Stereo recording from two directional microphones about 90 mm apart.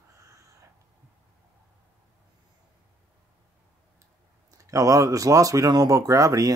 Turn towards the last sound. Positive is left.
turn(degrees=-40)  # may be behind; listen again after turning